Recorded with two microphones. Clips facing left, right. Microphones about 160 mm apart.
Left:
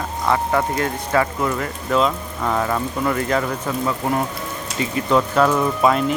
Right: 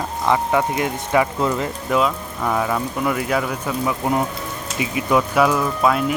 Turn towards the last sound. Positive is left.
turn(degrees=-5)  # may be behind; listen again after turning